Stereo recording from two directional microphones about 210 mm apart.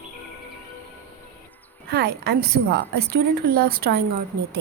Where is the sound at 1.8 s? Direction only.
45° right (ahead or behind).